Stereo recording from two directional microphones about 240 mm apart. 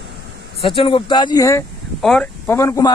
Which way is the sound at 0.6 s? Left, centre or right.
Left.